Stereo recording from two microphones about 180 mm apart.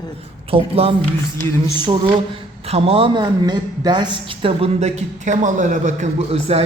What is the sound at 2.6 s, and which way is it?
A woman's voice, 35° right (ahead or behind).